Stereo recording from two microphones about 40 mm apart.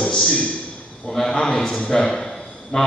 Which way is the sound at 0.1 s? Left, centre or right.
Centre.